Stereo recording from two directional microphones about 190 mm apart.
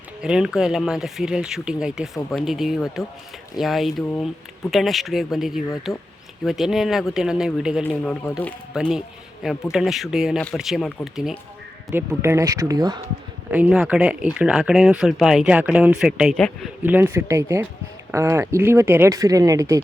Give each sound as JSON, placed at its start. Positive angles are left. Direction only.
{"t": 0.2, "sound": "speech", "side_deg": -5}
{"t": 7.9, "sound": "speech", "side_deg": 10}
{"t": 8.7, "sound": "a man's voice", "side_deg": -5}
{"t": 11.9, "sound": "speech", "side_deg": -15}
{"t": 13.5, "sound": "speech", "side_deg": -5}